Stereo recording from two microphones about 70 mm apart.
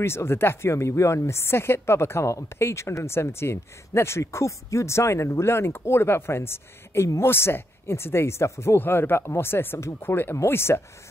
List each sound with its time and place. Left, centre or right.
0.0 s speech: left